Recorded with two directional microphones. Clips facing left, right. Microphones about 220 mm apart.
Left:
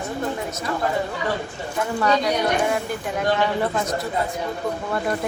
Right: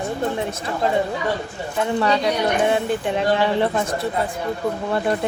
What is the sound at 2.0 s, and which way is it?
Speech, 25° right (ahead or behind).